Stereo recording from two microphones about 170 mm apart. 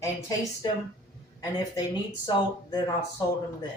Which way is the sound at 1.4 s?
25° left (ahead or behind).